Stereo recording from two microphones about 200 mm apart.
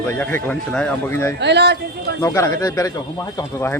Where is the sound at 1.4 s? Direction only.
55° right (ahead or behind).